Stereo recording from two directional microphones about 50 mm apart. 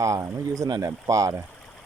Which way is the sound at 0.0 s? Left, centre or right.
Right.